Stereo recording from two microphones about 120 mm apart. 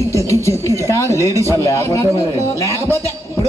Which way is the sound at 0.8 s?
25° right (ahead or behind).